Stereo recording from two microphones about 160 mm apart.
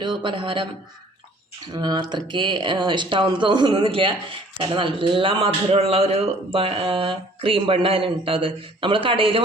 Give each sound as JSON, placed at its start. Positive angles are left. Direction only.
{"t": 0.0, "sound": "speech", "side_deg": -30}
{"t": 1.7, "sound": "speech", "side_deg": -25}